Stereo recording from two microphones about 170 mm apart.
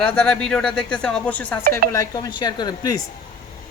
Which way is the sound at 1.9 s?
20° left (ahead or behind).